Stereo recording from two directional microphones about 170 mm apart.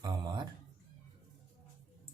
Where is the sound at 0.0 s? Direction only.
25° right (ahead or behind).